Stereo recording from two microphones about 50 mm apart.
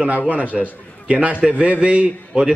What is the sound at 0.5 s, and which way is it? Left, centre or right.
Speech, centre.